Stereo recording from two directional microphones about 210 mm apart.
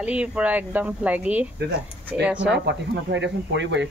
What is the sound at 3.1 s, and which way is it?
Speech, 55° right (ahead or behind).